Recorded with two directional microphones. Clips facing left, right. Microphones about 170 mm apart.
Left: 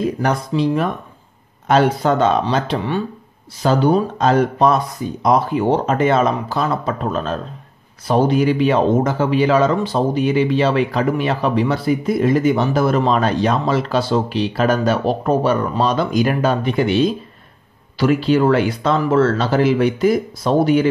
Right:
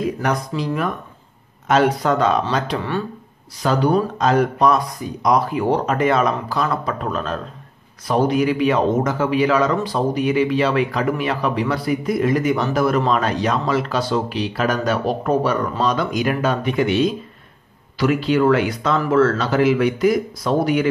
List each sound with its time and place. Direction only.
0.5 s speech: 30° left (ahead or behind)
3.6 s speech: 30° left (ahead or behind)